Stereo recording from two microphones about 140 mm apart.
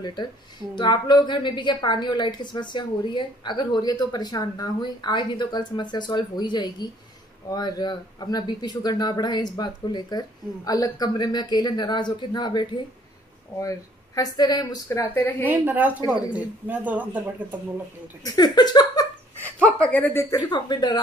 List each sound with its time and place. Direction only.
0.0 s a woman's voice: 30° left (ahead or behind)
14.9 s a woman's voice: 20° left (ahead or behind)
15.4 s a woman's voice: 10° right (ahead or behind)
18.2 s speech: 30° left (ahead or behind)
19.4 s speech: 10° left (ahead or behind); by 21.0 s 30° left (ahead or behind)